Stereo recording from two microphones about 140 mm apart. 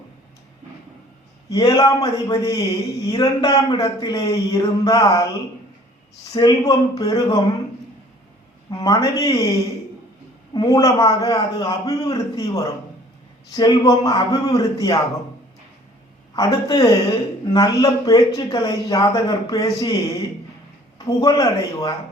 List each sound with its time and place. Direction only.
1.5 s a man's voice: 25° left (ahead or behind)
6.3 s a man's voice: 25° left (ahead or behind)
8.7 s a man's voice: 25° left (ahead or behind)
10.5 s a man's voice: 25° left (ahead or behind)
16.3 s a man's voice: 30° left (ahead or behind)
21.0 s a man's voice: 25° left (ahead or behind)